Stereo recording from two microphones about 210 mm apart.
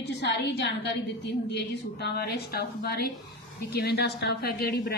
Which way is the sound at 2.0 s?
50° left (ahead or behind).